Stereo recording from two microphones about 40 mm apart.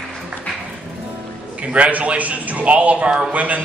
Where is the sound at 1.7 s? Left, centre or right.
Right.